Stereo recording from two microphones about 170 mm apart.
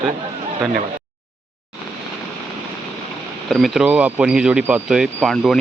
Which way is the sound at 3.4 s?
Centre (ahead or behind).